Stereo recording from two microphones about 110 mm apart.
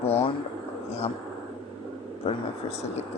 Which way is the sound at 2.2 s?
75° left (ahead or behind).